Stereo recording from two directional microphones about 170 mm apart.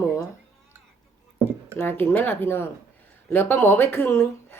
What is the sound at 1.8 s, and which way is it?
Speech, 15° left (ahead or behind).